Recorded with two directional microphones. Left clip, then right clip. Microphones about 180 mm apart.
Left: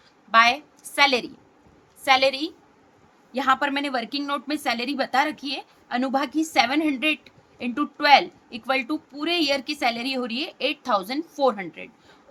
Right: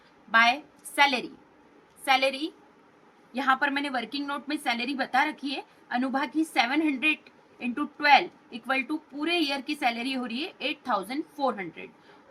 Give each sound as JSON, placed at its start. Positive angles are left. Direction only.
{"t": 0.3, "sound": "a woman's voice", "side_deg": 55}